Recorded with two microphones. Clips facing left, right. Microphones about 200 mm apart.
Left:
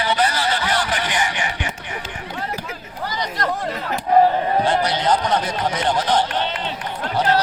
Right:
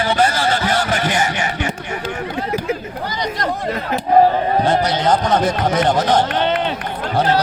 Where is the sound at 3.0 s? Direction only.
20° right (ahead or behind).